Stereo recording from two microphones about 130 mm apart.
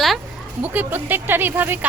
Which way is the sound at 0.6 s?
15° right (ahead or behind).